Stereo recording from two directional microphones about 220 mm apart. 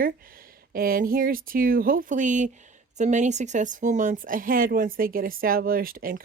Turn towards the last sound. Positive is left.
turn(degrees=-40)  # may be behind; listen again after turning